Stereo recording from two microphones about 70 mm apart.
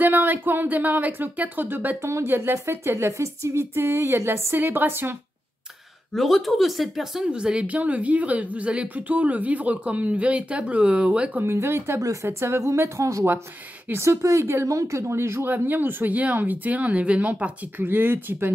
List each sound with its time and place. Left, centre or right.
0.0 s speech: right
2.0 s speech: right
4.6 s speech: right
6.1 s speech: centre
7.2 s speech: centre
11.4 s speech: right
12.0 s speech: right
12.3 s speech: right